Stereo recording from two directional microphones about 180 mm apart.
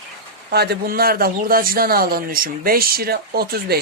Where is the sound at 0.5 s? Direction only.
65° right (ahead or behind).